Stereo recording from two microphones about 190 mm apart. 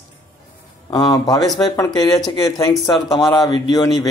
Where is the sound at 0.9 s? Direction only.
20° left (ahead or behind).